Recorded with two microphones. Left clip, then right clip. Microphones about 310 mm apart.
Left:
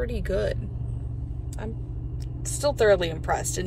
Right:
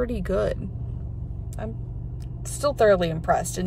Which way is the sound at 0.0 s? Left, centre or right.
Right.